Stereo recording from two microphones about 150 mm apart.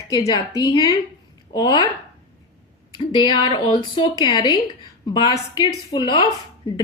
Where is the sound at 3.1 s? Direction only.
30° left (ahead or behind).